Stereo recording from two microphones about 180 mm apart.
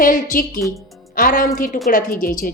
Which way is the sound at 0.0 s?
50° left (ahead or behind).